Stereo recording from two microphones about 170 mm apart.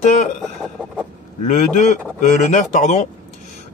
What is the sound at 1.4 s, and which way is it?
Speech, 45° left (ahead or behind).